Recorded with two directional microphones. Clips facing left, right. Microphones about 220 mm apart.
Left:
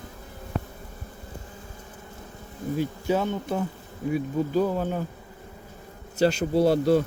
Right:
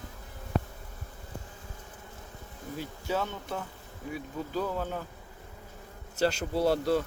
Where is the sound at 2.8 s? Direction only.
15° left (ahead or behind).